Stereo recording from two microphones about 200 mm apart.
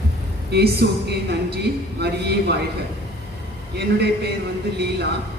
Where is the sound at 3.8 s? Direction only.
55° right (ahead or behind).